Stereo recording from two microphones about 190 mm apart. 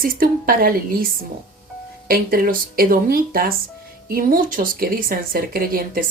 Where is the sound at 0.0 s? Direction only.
50° right (ahead or behind).